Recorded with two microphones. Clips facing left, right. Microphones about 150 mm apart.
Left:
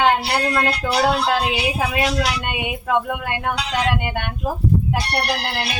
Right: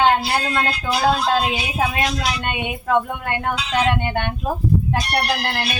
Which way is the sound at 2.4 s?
10° left (ahead or behind).